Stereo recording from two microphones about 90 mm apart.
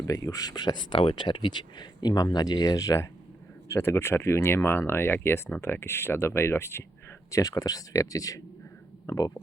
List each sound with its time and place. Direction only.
0.0 s speech: 40° left (ahead or behind)
3.7 s speech: 25° left (ahead or behind); by 9.3 s 45° left (ahead or behind)